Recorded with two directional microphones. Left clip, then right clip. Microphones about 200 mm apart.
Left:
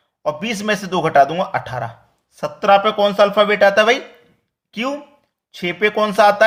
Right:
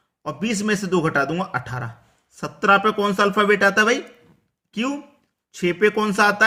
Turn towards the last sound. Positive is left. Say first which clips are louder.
# left 5 dB
turn(degrees=-20)  # may be behind; listen again after turning